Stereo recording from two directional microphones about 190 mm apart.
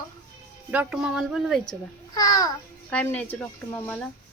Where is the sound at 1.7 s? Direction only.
20° left (ahead or behind).